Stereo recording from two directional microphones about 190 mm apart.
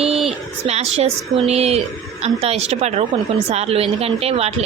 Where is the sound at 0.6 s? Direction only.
35° right (ahead or behind).